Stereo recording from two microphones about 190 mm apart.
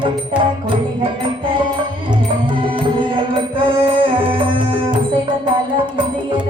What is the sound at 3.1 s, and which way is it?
Music, 25° right (ahead or behind).